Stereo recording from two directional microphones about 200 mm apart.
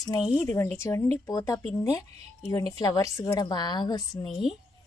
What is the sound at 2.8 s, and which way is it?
A woman's voice, 20° left (ahead or behind).